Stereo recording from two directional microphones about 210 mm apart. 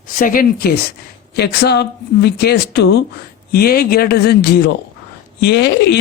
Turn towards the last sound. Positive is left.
turn(degrees=55)  # may be behind; listen again after turning